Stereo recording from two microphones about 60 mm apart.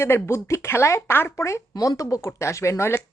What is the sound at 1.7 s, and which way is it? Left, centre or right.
Speech, left.